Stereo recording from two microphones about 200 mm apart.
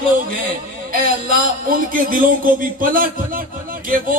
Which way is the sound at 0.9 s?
45° right (ahead or behind).